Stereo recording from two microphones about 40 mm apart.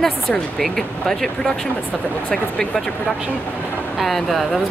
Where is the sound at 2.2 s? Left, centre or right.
Left.